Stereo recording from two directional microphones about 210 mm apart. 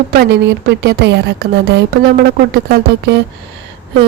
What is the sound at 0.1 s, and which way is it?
A woman's voice, 50° right (ahead or behind).